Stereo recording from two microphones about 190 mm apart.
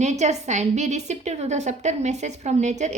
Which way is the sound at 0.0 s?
35° right (ahead or behind).